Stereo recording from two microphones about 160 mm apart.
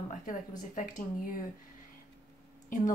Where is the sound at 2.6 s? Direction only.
50° left (ahead or behind).